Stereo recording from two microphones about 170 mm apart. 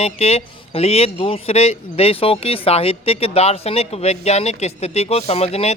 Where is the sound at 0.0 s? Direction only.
35° left (ahead or behind).